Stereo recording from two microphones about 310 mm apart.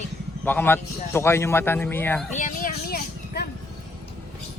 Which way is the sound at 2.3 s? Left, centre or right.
Left.